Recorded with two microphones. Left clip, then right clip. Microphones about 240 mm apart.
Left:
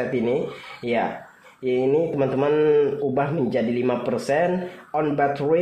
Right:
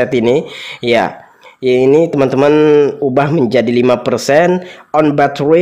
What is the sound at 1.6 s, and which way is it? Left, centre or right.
Speech, right.